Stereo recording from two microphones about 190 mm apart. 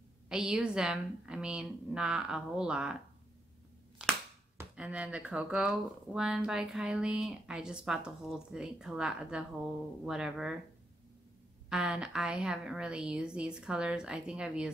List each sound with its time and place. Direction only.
0.3 s speech: 5° right (ahead or behind)
4.6 s speech: 5° right (ahead or behind)
11.7 s speech: 5° right (ahead or behind)